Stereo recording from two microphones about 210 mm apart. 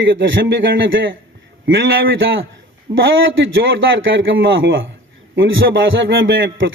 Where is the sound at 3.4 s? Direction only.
65° right (ahead or behind).